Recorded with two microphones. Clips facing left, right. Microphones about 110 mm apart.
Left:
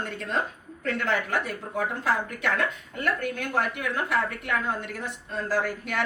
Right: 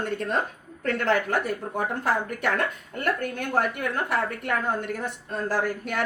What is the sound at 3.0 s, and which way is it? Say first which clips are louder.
Speech: right 1 dB; 45° right (ahead or behind).